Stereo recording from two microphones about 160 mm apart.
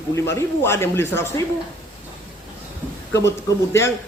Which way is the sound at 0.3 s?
15° left (ahead or behind).